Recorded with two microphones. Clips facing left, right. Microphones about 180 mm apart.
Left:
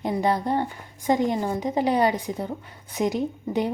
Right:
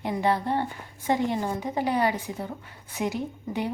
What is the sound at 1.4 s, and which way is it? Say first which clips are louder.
A woman's voice: left 4 dB; 20° left (ahead or behind).